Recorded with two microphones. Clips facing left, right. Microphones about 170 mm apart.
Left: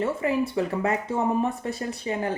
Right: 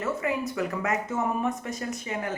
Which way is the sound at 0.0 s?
30° left (ahead or behind).